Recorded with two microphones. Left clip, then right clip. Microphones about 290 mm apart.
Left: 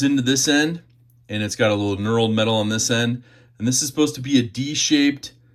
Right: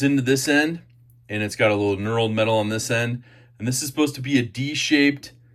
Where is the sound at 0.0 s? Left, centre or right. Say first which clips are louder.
Left 1 dB; centre.